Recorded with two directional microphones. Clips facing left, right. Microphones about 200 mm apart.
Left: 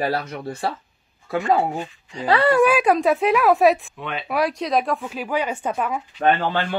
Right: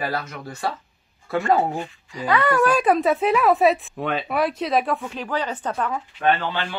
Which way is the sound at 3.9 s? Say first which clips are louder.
Right 5 dB; 40° right (ahead or behind).